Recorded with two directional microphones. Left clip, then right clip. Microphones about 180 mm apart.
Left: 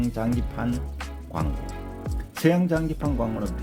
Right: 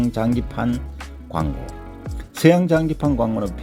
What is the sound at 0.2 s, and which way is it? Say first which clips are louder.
Speech: right 6 dB; 35° right (ahead or behind).